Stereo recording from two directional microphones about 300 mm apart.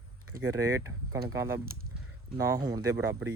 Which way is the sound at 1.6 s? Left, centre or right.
Right.